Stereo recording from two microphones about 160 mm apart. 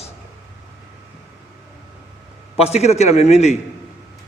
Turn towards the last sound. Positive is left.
turn(degrees=45)  # may be behind; listen again after turning